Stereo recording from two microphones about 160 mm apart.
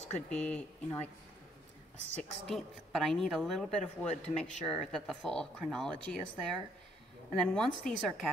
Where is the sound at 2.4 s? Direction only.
Centre (ahead or behind).